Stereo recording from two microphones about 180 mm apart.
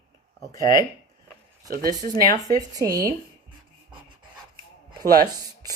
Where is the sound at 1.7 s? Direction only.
50° right (ahead or behind).